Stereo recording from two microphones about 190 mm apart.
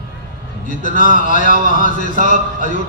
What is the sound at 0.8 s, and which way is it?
A man's voice, 45° left (ahead or behind).